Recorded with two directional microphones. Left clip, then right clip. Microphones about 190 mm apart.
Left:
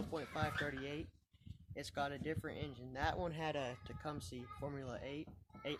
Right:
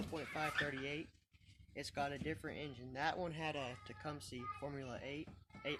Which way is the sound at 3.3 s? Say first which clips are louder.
Left 2 dB; 15° left (ahead or behind).